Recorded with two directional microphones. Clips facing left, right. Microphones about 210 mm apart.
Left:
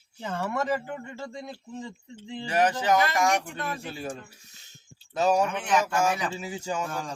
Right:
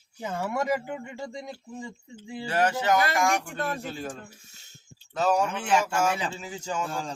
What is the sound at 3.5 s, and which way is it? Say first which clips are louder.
Speech: right 3 dB; 45° right (ahead or behind).